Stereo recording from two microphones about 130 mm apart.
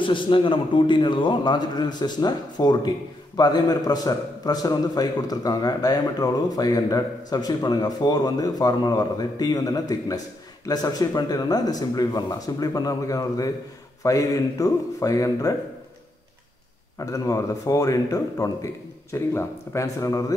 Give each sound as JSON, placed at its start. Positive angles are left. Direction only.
{"t": 0.0, "sound": "a man's voice", "side_deg": 40}
{"t": 17.0, "sound": "a man's voice", "side_deg": 25}